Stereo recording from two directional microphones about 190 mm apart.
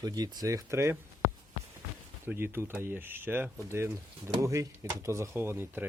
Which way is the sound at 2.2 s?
10° right (ahead or behind).